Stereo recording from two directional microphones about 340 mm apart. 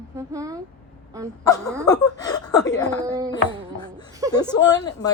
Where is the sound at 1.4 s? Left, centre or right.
Centre.